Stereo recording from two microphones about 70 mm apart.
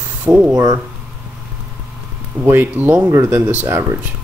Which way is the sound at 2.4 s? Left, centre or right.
Right.